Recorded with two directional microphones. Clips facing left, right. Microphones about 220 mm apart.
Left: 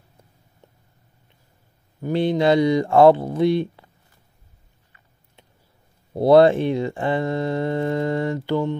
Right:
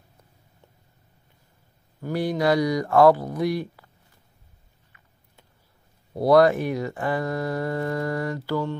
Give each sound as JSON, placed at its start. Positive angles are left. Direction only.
{"t": 2.0, "sound": "speech", "side_deg": 20}
{"t": 6.1, "sound": "speech", "side_deg": 25}